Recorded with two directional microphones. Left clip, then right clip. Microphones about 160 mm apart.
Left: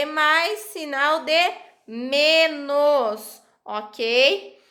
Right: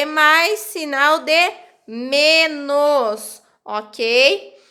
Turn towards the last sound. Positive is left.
turn(degrees=-30)  # may be behind; listen again after turning